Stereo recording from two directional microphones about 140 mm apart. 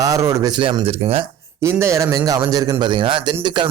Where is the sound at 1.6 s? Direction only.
20° right (ahead or behind).